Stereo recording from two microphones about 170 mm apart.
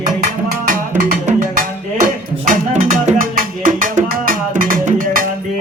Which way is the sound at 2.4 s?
45° right (ahead or behind).